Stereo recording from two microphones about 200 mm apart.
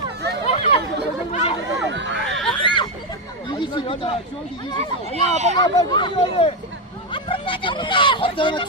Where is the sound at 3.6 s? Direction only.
25° left (ahead or behind).